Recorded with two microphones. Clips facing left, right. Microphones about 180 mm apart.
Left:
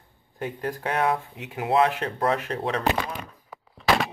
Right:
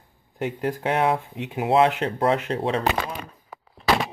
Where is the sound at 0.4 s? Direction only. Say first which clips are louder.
Right 4 dB; 25° right (ahead or behind).